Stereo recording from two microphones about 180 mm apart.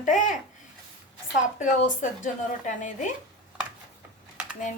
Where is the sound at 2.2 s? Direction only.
45° left (ahead or behind).